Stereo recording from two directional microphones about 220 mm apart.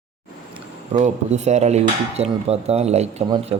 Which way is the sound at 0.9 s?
30° right (ahead or behind).